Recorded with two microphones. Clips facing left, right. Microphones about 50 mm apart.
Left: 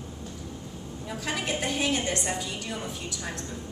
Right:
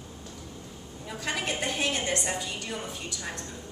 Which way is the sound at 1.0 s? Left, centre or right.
Centre.